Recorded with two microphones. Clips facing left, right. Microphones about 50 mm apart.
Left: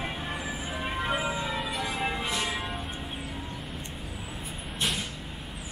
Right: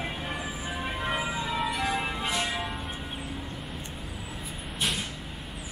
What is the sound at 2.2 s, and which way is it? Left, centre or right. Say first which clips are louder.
Music: right 1 dB; centre.